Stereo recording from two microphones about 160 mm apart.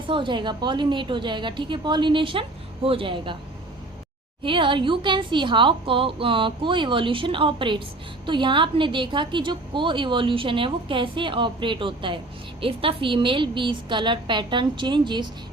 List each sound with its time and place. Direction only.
0.1 s a woman's voice: 30° right (ahead or behind)
4.4 s a woman's voice: 30° right (ahead or behind)